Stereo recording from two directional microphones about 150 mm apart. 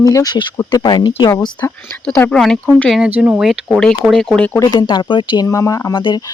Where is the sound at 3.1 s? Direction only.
10° right (ahead or behind).